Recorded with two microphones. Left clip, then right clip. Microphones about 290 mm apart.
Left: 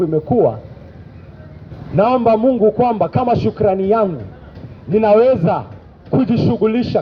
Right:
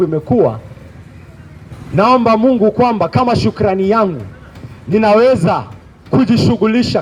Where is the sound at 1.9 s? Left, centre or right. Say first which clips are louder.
Right 2 dB; right.